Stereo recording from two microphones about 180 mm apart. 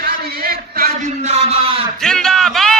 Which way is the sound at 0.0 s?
60° right (ahead or behind).